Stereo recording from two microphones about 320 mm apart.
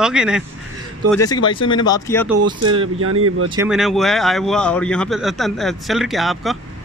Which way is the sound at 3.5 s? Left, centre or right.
Centre.